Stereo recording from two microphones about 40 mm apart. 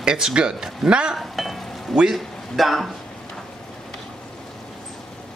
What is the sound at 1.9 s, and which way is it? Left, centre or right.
Speech, centre.